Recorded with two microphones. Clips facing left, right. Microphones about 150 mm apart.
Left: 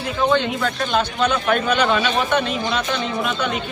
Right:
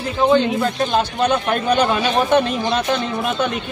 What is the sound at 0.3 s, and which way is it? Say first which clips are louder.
Speech: right 6 dB; 35° right (ahead or behind).